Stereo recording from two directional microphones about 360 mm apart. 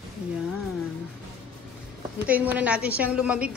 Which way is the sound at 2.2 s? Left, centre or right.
Centre.